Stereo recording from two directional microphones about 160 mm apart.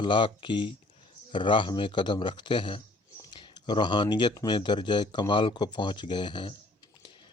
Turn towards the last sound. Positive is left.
turn(degrees=30)  # may be behind; listen again after turning